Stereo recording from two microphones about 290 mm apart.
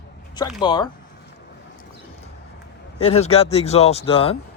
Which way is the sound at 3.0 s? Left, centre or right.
Left.